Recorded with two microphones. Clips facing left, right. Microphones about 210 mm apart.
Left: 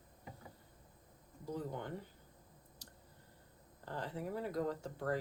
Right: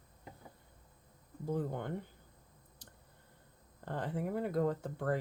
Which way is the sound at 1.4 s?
55° right (ahead or behind).